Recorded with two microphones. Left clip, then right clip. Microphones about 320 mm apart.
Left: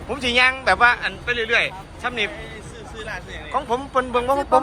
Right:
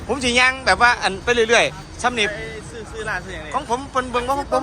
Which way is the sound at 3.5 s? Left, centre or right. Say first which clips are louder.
Left 1 dB; centre.